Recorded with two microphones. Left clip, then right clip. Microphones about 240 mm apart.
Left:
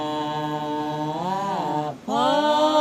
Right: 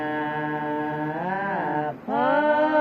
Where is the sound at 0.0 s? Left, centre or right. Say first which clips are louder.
Left 1 dB; left.